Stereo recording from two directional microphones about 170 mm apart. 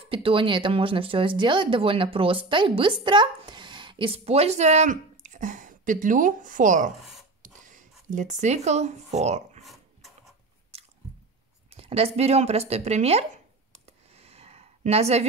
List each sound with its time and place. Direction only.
0.0 s speech: 30° right (ahead or behind); by 6.9 s 50° right (ahead or behind)
7.4 s a sound: 50° right (ahead or behind)
8.1 s speech: 45° right (ahead or behind)
9.7 s dog: centre (ahead or behind)
10.7 s chewing: 40° right (ahead or behind)
11.7 s speech: 35° right (ahead or behind)
13.8 s a sound: 35° right (ahead or behind)